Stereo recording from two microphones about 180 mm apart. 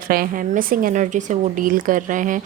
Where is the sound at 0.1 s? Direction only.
50° right (ahead or behind).